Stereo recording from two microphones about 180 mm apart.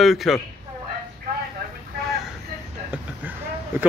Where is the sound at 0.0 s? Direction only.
Centre (ahead or behind).